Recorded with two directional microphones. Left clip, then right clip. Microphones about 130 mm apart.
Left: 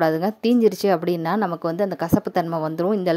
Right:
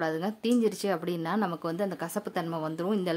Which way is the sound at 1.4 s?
40° left (ahead or behind).